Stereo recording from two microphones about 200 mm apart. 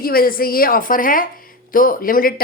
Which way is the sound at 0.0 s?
45° left (ahead or behind).